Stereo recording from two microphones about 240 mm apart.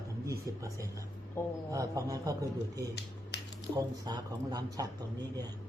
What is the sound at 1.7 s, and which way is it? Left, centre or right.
A man's voice, centre.